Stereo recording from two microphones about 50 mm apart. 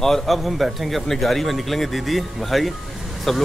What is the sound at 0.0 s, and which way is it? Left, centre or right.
Speech, centre.